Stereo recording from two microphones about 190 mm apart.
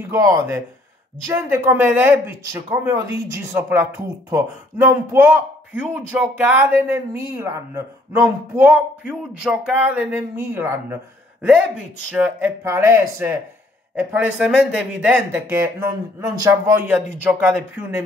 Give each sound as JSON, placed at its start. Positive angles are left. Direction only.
{"t": 0.1, "sound": "speech", "side_deg": -15}
{"t": 12.1, "sound": "speech", "side_deg": -10}